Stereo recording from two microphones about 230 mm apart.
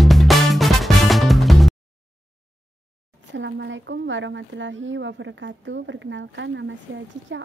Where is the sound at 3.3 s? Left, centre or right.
Right.